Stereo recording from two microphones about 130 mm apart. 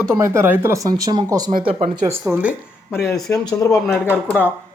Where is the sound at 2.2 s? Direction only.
10° right (ahead or behind).